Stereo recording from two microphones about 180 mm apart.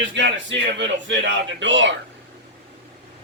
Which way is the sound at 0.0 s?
90° right.